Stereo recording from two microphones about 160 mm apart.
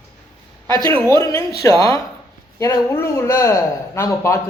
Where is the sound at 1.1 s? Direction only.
20° left (ahead or behind).